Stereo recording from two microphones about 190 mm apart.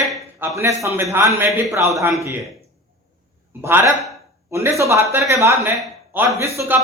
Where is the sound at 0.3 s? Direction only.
15° right (ahead or behind).